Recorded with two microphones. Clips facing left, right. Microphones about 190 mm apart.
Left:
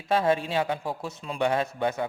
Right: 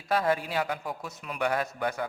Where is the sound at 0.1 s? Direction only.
25° left (ahead or behind).